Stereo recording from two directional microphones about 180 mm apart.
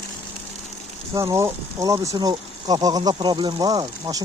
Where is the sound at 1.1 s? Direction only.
15° right (ahead or behind).